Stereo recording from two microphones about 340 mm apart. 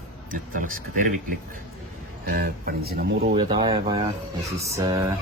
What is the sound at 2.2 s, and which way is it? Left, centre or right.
Speech, right.